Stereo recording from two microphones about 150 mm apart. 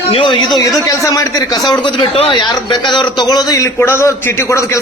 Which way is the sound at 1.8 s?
35° left (ahead or behind).